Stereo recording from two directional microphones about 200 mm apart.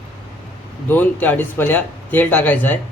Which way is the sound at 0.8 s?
10° left (ahead or behind).